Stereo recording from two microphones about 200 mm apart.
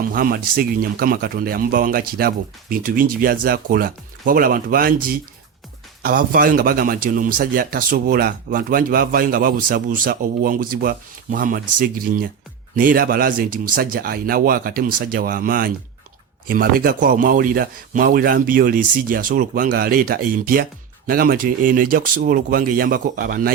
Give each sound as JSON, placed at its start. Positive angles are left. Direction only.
{"t": 0.1, "sound": "a man's voice", "side_deg": -45}